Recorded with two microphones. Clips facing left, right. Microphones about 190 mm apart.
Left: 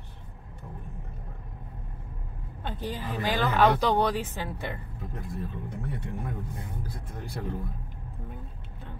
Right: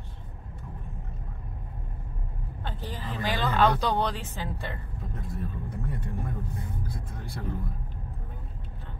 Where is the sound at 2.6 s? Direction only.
15° left (ahead or behind).